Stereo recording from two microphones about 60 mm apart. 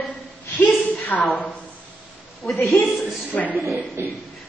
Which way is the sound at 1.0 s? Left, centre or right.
Left.